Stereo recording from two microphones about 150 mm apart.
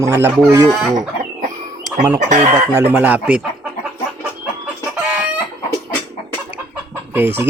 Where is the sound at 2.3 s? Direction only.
55° right (ahead or behind).